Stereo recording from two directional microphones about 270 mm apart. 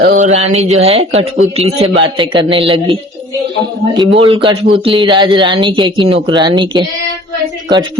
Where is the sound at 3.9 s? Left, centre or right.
Centre.